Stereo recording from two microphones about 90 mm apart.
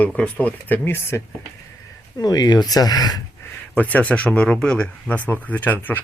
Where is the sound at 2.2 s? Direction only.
50° left (ahead or behind).